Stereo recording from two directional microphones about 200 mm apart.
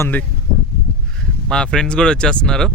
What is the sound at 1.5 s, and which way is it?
Speech, 5° left (ahead or behind).